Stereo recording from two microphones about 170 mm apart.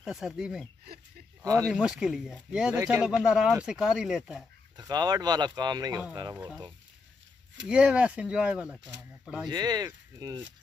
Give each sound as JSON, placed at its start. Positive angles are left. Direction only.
{"t": 0.0, "sound": "speech", "side_deg": -5}
{"t": 1.4, "sound": "speech", "side_deg": -20}
{"t": 1.7, "sound": "speech", "side_deg": -5}
{"t": 4.7, "sound": "speech", "side_deg": -25}
{"t": 6.3, "sound": "speech", "side_deg": -10}
{"t": 7.6, "sound": "speech", "side_deg": -5}
{"t": 9.5, "sound": "speech", "side_deg": -25}